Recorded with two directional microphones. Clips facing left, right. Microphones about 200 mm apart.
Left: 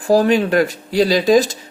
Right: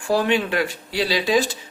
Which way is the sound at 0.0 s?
40° left (ahead or behind).